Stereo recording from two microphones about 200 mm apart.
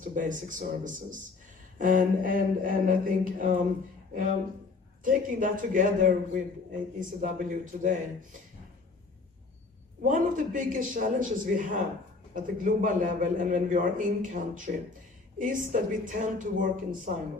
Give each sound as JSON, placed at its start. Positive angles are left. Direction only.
{"t": 0.0, "sound": "a man's voice", "side_deg": -40}
{"t": 1.8, "sound": "mantra", "side_deg": -40}
{"t": 4.1, "sound": "a man's voice", "side_deg": -40}
{"t": 10.0, "sound": "a man's voice", "side_deg": -40}